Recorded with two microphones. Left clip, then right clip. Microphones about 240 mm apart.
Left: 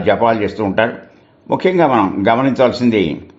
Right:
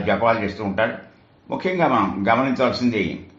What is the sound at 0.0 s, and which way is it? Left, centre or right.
Speech, left.